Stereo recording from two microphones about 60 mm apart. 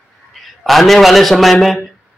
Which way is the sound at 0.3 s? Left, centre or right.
Centre.